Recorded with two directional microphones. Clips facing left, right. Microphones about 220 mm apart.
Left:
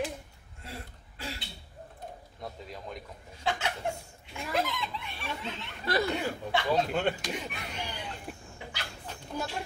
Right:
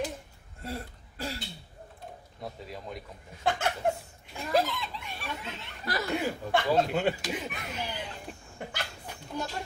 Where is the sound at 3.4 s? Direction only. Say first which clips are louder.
Right 3 dB; 50° right (ahead or behind).